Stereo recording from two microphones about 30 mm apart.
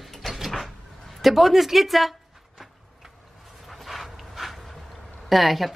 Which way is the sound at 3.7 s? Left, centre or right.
Centre.